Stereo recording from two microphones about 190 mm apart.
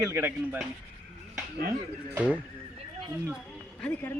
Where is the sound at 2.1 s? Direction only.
5° right (ahead or behind).